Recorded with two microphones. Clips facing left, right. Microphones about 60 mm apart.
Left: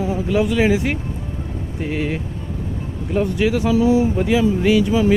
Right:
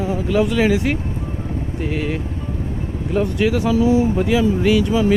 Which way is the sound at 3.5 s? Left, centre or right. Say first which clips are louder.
Even; left.